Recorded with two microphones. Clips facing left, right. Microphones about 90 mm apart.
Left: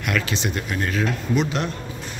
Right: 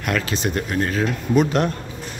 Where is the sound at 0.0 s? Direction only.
35° right (ahead or behind).